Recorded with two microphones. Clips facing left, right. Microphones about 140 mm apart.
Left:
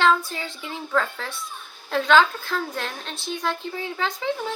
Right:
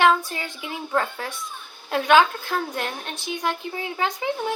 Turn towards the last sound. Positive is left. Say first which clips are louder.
# right 1 dB
turn(degrees=-15)  # may be behind; listen again after turning